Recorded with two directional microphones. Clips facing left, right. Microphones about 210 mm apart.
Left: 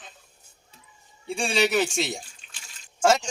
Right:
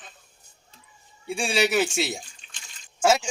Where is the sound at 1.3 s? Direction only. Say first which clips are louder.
Even; 5° right (ahead or behind).